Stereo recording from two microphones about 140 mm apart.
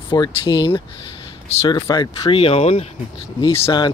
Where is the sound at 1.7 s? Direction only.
35° left (ahead or behind).